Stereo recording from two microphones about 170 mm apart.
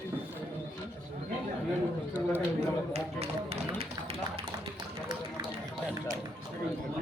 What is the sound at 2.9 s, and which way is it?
Speech, 35° right (ahead or behind).